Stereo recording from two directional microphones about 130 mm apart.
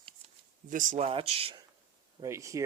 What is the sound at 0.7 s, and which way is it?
Speech, 85° right.